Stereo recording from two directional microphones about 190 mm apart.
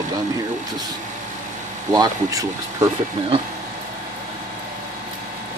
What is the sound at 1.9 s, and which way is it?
Speech, 20° right (ahead or behind).